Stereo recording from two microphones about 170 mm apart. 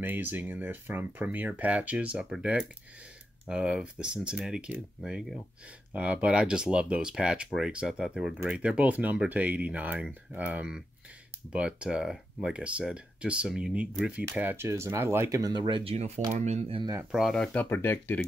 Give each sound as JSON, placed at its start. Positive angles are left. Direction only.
{"t": 0.0, "sound": "speech", "side_deg": -10}
{"t": 17.1, "sound": "speech", "side_deg": 0}